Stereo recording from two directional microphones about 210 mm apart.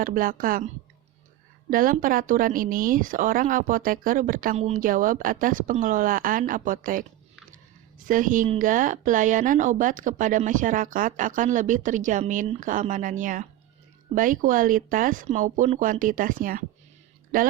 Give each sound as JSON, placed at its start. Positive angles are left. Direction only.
{"t": 0.0, "sound": "speech", "side_deg": -40}
{"t": 1.7, "sound": "speech", "side_deg": -40}